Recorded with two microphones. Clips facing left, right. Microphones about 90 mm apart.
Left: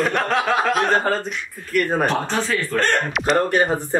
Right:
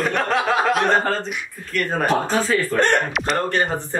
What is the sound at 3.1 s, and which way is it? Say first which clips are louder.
Speech: left 3 dB; centre (ahead or behind).